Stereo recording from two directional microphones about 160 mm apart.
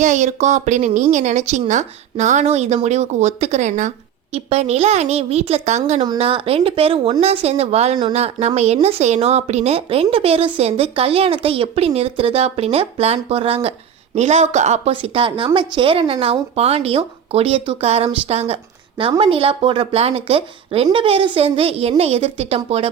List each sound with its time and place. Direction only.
0.0 s speech: 50° right (ahead or behind)